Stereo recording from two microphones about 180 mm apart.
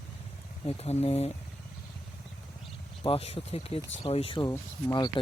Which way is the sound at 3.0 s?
30° left (ahead or behind).